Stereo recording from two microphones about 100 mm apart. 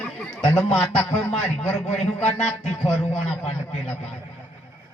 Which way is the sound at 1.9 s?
90° left.